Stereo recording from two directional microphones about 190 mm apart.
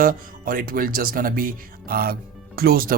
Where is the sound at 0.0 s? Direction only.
50° right (ahead or behind).